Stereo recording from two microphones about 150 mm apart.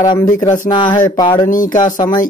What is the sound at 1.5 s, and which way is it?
Speech, 60° left (ahead or behind).